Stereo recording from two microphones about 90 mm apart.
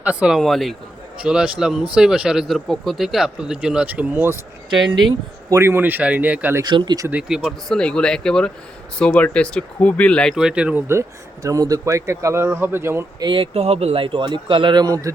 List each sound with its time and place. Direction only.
0.0 s speech: 15° right (ahead or behind)
0.3 s speech: centre (ahead or behind)
1.2 s speech: 10° right (ahead or behind)
5.5 s speech: 25° right (ahead or behind)
6.6 s speech: 55° right (ahead or behind)
7.1 s speech: 10° right (ahead or behind)
7.7 s speech: 10° left (ahead or behind)
10.3 s speech: 10° right (ahead or behind)
11.4 s speech: 40° right (ahead or behind)
13.1 s speech: 55° right (ahead or behind)
13.4 s speech: 90° right; by 15.1 s 40° right (ahead or behind)